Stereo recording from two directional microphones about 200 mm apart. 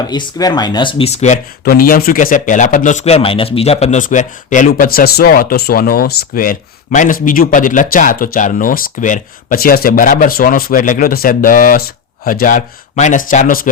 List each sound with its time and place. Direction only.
0.1 s speech: 20° left (ahead or behind)
1.6 s speech: 50° left (ahead or behind)